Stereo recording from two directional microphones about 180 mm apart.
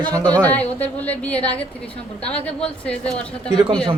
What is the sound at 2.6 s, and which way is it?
Speech, 5° left (ahead or behind).